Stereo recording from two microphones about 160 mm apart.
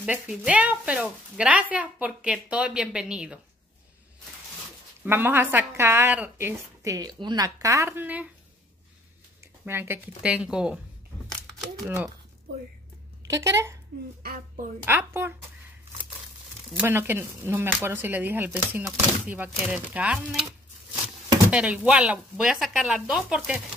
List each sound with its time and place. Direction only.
0.0 s speech: 10° right (ahead or behind)
5.0 s speech: 15° right (ahead or behind)
9.7 s speech: 15° right (ahead or behind)
13.3 s speech: 20° right (ahead or behind)
14.2 s speech: 70° right (ahead or behind)
14.9 s speech: 15° right (ahead or behind)
16.8 s speech: 15° right (ahead or behind)
21.5 s speech: 10° right (ahead or behind)